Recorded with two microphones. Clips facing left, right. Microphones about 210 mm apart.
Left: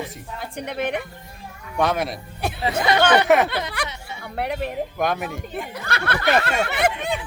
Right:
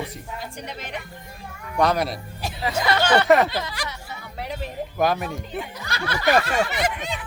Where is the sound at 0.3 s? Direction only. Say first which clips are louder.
Left 8 dB; 60° left (ahead or behind).